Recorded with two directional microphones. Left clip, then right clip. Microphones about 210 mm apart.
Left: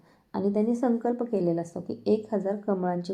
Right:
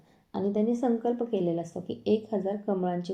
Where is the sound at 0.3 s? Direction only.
20° left (ahead or behind).